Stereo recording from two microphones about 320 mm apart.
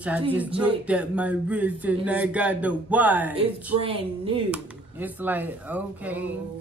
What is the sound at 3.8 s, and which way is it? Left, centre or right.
Speech, centre.